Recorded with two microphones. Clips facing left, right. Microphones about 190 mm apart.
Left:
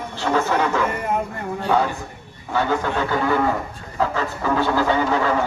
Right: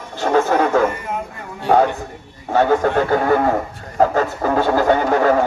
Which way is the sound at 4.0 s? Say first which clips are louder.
Right 7 dB; 45° right (ahead or behind).